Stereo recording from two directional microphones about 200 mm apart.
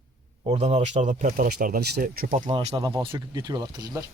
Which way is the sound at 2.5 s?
30° right (ahead or behind).